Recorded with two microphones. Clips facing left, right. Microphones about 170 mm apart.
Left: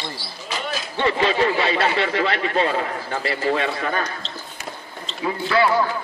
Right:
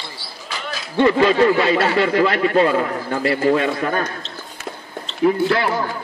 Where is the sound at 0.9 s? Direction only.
45° right (ahead or behind).